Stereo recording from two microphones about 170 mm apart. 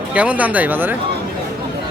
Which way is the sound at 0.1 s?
10° right (ahead or behind).